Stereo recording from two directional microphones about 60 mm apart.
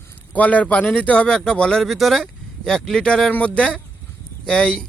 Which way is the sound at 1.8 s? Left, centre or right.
Centre.